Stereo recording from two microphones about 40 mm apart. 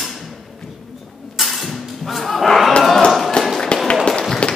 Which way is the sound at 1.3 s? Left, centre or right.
Centre.